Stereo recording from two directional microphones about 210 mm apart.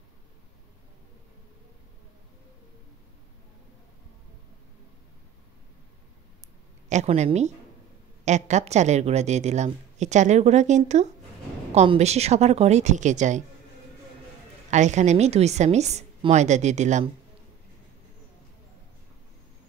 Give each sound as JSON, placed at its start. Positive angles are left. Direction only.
{"t": 6.9, "sound": "a woman's voice", "side_deg": -30}
{"t": 14.7, "sound": "a woman's voice", "side_deg": -35}